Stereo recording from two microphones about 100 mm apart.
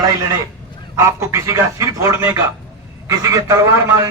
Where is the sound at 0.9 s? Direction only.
30° right (ahead or behind).